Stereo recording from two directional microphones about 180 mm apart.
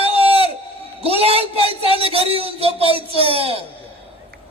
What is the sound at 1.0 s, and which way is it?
A man's voice, 35° right (ahead or behind).